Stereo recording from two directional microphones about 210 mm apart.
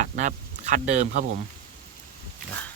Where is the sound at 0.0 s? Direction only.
35° right (ahead or behind).